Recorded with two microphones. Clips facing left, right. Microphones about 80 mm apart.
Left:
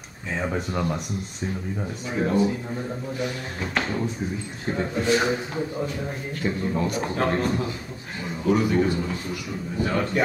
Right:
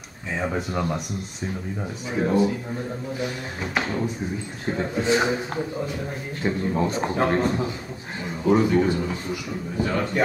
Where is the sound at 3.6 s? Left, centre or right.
Centre.